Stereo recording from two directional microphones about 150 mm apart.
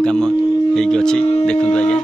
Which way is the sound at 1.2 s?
40° left (ahead or behind).